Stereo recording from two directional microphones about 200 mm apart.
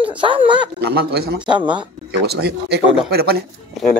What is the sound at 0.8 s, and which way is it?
Speech, 50° right (ahead or behind).